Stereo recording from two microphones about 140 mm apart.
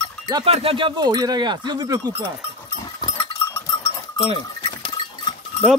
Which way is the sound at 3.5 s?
15° left (ahead or behind).